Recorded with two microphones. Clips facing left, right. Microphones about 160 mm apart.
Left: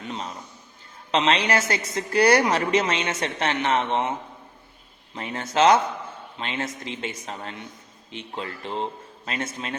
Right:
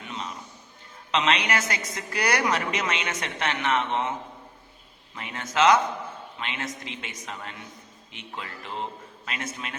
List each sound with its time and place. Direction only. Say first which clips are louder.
0.0 s a sound: left 3 dB; 35° left (ahead or behind)
1.1 s a woman's voice: left 3 dB; 30° left (ahead or behind)
5.1 s a woman's voice: left 3 dB; 35° left (ahead or behind)